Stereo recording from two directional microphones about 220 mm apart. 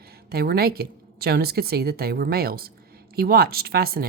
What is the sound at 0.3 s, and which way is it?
Speech, 45° right (ahead or behind).